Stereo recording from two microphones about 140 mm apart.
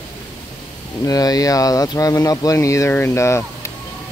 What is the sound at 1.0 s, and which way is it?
Speech, 25° left (ahead or behind).